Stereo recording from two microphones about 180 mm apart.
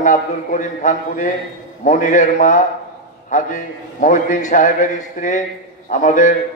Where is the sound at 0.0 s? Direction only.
45° left (ahead or behind).